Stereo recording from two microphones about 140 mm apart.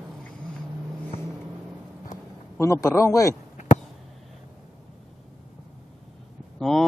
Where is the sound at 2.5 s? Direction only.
20° left (ahead or behind).